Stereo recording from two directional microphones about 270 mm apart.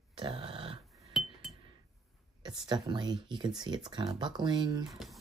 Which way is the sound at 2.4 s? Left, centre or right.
Centre.